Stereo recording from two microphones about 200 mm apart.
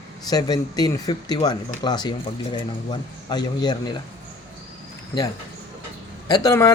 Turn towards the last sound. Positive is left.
turn(degrees=15)  # may be behind; listen again after turning